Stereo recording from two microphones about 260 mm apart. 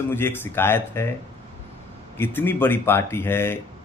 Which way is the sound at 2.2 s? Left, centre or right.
Centre.